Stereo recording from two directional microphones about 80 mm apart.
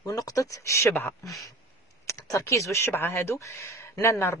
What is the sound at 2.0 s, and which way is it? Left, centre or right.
Speech, left.